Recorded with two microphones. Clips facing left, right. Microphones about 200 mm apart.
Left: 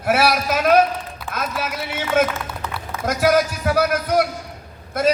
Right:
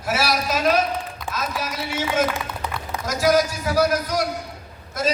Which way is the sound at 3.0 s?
60° left (ahead or behind).